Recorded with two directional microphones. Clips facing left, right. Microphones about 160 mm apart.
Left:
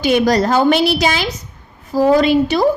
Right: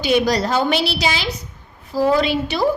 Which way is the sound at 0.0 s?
50° left (ahead or behind).